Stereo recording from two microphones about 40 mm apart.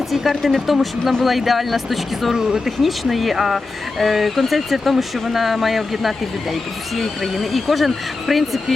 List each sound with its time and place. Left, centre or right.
0.1 s speech: centre
2.3 s speech: centre
2.6 s speech: centre